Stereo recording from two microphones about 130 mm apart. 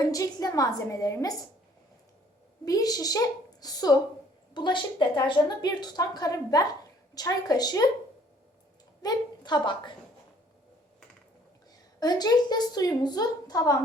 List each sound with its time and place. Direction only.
0.0 s a woman's voice: 25° left (ahead or behind)
2.6 s a woman's voice: 30° left (ahead or behind)
9.0 s a woman's voice: 30° left (ahead or behind)
11.9 s a woman's voice: 30° left (ahead or behind)